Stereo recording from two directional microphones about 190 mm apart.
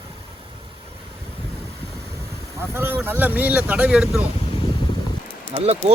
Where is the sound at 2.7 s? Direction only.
10° right (ahead or behind).